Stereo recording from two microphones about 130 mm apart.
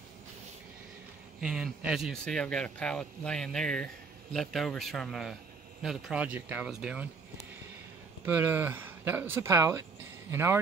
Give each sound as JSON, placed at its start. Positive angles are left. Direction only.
{"t": 1.4, "sound": "speech", "side_deg": -5}
{"t": 2.2, "sound": "speech", "side_deg": 5}
{"t": 8.3, "sound": "speech", "side_deg": -15}